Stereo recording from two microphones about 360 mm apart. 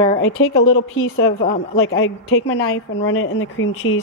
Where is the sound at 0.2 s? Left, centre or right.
Left.